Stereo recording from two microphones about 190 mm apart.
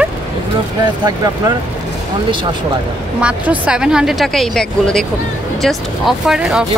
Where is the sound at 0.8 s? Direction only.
20° right (ahead or behind).